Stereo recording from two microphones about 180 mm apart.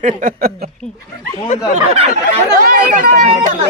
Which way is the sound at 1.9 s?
35° right (ahead or behind).